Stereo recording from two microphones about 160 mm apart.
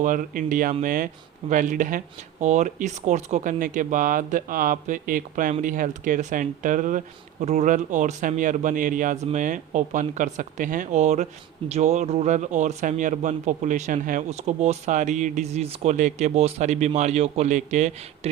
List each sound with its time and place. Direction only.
0.0 s speech: 55° right (ahead or behind)